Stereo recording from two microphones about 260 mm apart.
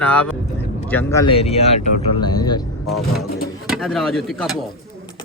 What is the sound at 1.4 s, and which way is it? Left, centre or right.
A man's voice, left.